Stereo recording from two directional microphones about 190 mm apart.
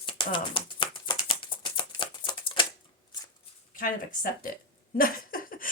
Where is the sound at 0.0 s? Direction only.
25° left (ahead or behind).